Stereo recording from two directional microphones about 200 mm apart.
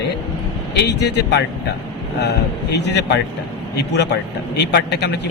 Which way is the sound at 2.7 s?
60° left (ahead or behind).